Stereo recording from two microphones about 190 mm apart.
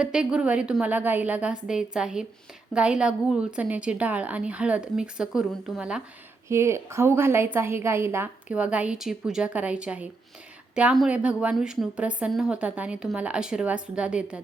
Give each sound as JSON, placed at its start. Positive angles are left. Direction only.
{"t": 0.0, "sound": "a woman's voice", "side_deg": -5}
{"t": 6.5, "sound": "a woman's voice", "side_deg": -15}